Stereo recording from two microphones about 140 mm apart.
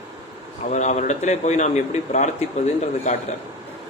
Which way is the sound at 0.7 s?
60° left (ahead or behind).